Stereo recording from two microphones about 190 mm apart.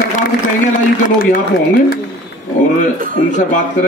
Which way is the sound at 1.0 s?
45° left (ahead or behind).